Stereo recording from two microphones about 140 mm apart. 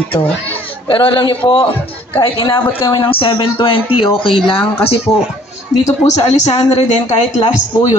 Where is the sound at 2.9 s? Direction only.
35° left (ahead or behind).